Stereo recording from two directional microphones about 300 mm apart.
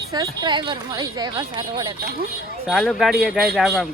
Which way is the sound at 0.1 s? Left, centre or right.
Centre.